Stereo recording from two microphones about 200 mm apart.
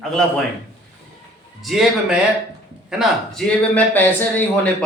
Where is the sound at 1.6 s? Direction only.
Centre (ahead or behind).